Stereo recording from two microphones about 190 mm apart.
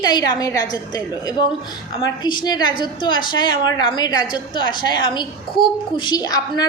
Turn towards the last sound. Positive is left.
turn(degrees=20)  # may be behind; listen again after turning